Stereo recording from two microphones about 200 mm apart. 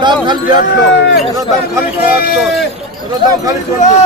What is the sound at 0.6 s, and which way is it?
Speech, 50° left (ahead or behind).